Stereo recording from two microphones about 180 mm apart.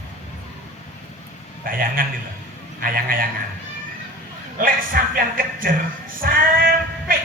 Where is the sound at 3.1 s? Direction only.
50° right (ahead or behind).